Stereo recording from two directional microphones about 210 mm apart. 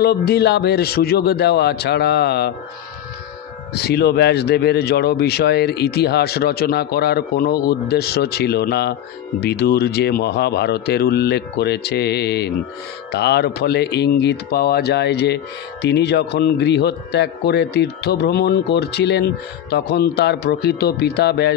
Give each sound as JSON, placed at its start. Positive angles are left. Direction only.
{"t": 0.0, "sound": "speech", "side_deg": 50}
{"t": 3.7, "sound": "speech", "side_deg": 50}